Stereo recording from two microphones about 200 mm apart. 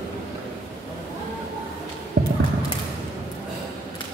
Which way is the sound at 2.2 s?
55° right (ahead or behind).